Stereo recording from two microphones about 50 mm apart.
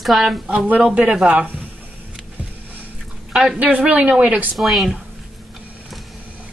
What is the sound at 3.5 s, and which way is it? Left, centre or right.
Speech, right.